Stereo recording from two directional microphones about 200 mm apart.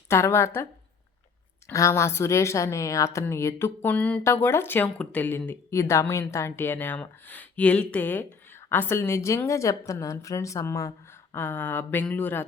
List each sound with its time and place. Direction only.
0.1 s speech: 15° left (ahead or behind)
1.7 s speech: 15° left (ahead or behind)